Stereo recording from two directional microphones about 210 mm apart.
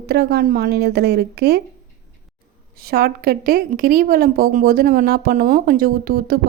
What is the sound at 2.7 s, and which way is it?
A woman's voice, 45° right (ahead or behind).